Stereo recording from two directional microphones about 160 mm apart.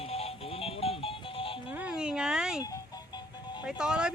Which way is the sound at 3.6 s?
5° right (ahead or behind).